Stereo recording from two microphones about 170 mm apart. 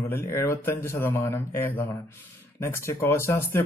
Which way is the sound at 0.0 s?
15° left (ahead or behind).